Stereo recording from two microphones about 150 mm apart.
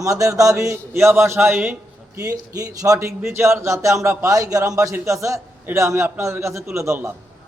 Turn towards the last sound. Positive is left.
turn(degrees=-15)  # may be behind; listen again after turning